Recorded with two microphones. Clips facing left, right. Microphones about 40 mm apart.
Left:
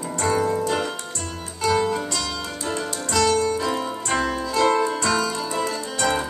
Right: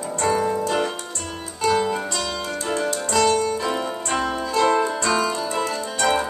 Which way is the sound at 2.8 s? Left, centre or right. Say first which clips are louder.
Right 5 dB; right.